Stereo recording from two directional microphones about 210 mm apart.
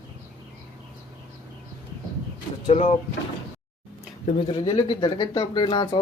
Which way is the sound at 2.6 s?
25° left (ahead or behind).